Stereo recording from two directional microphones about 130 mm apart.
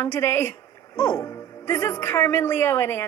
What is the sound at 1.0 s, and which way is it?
Speech, 25° left (ahead or behind).